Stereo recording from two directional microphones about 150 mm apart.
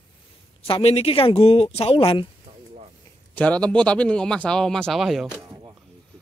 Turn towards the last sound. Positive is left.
turn(degrees=-20)  # may be behind; listen again after turning